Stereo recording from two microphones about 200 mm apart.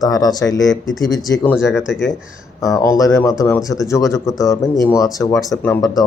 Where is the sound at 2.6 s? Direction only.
15° left (ahead or behind).